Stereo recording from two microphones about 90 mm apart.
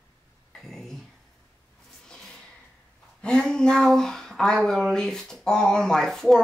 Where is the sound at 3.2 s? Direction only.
10° left (ahead or behind).